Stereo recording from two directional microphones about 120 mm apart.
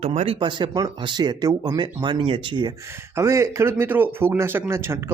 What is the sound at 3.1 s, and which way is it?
Speech, 25° right (ahead or behind).